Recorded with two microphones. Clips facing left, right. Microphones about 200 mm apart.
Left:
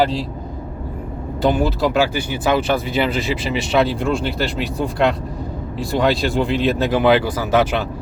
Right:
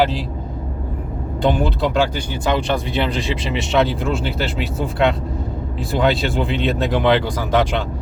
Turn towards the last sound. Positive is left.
turn(degrees=5)  # may be behind; listen again after turning